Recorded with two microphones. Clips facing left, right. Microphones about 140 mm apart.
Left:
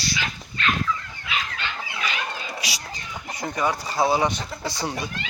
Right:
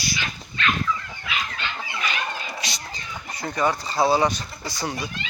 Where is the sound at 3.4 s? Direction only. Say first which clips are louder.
Right 1 dB; 15° left (ahead or behind).